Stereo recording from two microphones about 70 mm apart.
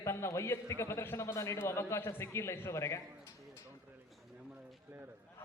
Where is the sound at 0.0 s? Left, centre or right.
Left.